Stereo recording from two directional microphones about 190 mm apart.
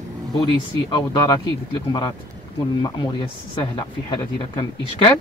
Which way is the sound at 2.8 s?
20° left (ahead or behind).